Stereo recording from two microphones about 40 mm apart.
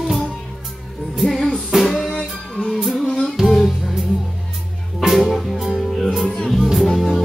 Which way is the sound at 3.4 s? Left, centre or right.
Centre.